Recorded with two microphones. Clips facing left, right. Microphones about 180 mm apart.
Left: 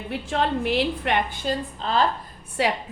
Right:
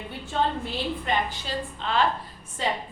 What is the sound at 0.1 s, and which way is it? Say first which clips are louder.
A woman's voice: left 3 dB; 90° left.